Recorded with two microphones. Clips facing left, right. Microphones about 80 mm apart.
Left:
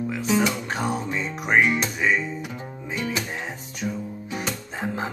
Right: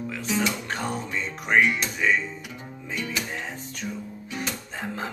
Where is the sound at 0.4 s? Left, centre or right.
Centre.